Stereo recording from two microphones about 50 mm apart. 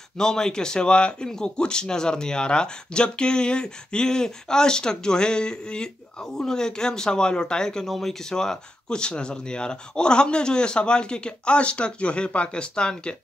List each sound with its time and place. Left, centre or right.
0.2 s a man's voice: centre